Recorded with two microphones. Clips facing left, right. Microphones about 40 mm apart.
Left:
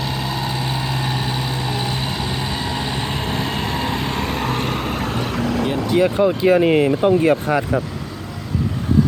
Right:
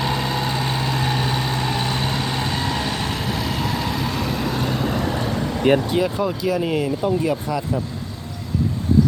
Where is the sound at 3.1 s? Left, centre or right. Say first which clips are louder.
Left 1 dB; left.